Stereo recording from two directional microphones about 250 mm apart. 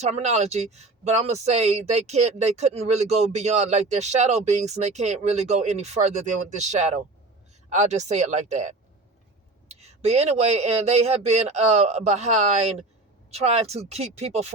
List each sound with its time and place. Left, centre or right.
0.0 s speech: right